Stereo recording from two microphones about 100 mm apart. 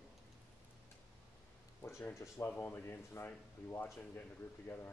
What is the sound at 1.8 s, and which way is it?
Speech, 25° left (ahead or behind).